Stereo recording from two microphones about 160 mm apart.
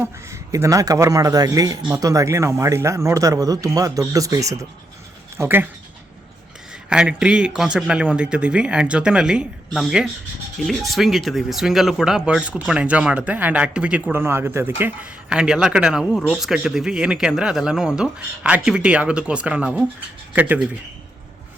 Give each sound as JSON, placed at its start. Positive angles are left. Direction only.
{"t": 0.0, "sound": "a man's voice", "side_deg": -15}
{"t": 6.9, "sound": "a man's voice", "side_deg": -5}